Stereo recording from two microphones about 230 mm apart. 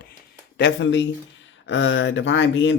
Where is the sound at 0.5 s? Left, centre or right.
Left.